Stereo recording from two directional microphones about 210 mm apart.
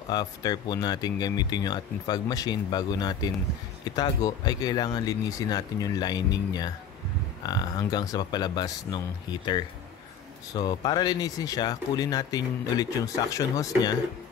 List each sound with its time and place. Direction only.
0.1 s speech: 20° left (ahead or behind)